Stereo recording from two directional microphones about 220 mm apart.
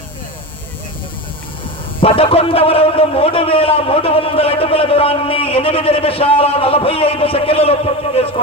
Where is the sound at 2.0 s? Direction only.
25° left (ahead or behind).